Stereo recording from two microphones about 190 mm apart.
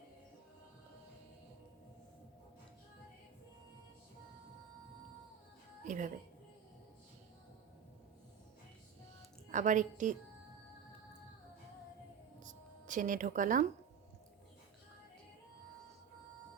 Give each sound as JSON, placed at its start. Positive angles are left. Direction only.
{"t": 5.8, "sound": "music", "side_deg": -40}
{"t": 9.5, "sound": "a woman's voice", "side_deg": -40}
{"t": 12.4, "sound": "music", "side_deg": -40}